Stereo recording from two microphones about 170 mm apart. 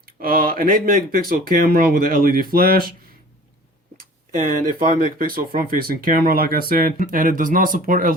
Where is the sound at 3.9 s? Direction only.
55° right (ahead or behind).